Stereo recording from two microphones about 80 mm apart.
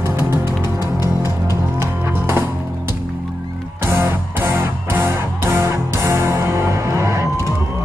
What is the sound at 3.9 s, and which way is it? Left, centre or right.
Music, right.